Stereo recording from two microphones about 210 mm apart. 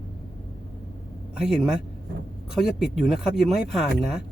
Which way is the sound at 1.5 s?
5° right (ahead or behind).